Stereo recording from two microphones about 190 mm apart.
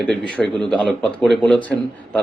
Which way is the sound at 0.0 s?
5° left (ahead or behind).